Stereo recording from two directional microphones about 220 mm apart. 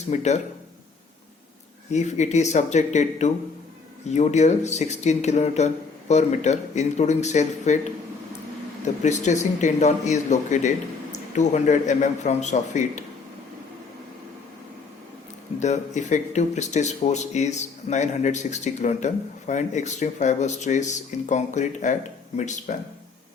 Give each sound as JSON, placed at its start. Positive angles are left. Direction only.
{"t": 0.1, "sound": "speech", "side_deg": 30}
{"t": 1.9, "sound": "speech", "side_deg": 30}
{"t": 9.0, "sound": "speech", "side_deg": 30}
{"t": 15.6, "sound": "speech", "side_deg": 30}